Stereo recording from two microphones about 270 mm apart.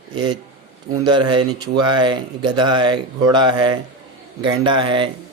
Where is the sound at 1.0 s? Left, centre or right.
Centre.